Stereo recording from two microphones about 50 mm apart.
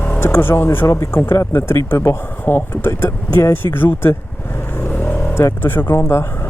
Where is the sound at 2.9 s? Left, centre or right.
Left.